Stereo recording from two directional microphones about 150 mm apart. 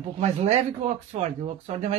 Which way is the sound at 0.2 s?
45° right (ahead or behind).